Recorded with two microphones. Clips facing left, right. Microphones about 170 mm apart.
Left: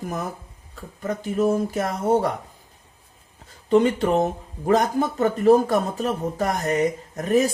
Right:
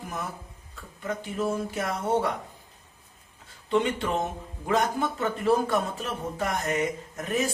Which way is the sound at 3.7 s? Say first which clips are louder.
Left 7 dB; 40° left (ahead or behind).